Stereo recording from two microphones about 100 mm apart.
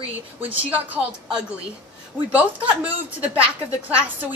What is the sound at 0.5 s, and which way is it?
Speech, 15° right (ahead or behind).